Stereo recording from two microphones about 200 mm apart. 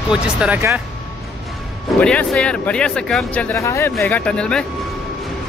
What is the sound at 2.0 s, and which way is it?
Speech, 5° left (ahead or behind).